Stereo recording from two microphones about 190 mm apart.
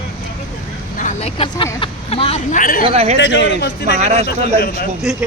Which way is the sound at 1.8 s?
30° left (ahead or behind).